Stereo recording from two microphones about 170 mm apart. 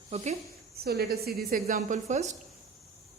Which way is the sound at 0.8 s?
70° right (ahead or behind).